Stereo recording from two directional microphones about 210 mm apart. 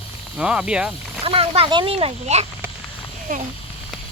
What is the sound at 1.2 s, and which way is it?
Speech, 25° right (ahead or behind).